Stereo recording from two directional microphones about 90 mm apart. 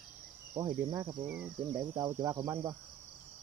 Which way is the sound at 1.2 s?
15° right (ahead or behind).